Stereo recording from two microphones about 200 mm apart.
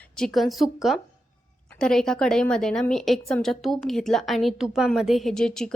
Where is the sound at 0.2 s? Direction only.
Centre (ahead or behind).